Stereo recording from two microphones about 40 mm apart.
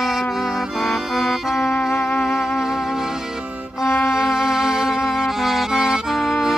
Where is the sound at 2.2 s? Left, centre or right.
Centre.